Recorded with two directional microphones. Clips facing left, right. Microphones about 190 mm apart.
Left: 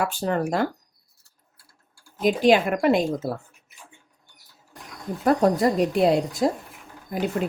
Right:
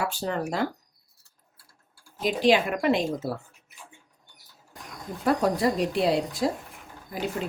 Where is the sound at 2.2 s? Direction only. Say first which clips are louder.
Left 3 dB; 50° left (ahead or behind).